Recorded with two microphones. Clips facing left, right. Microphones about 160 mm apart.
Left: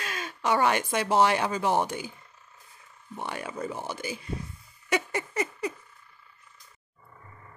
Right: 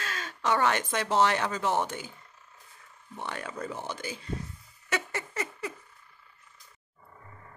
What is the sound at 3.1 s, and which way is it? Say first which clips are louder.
Speech: left 2 dB; 10° left (ahead or behind).